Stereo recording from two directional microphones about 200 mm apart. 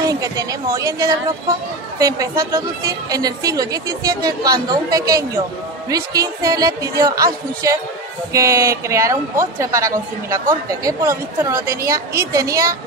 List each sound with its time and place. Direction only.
0.0 s speech: 15° right (ahead or behind)